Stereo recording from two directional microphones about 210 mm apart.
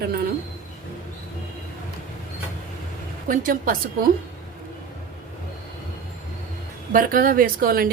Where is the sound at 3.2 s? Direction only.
40° right (ahead or behind).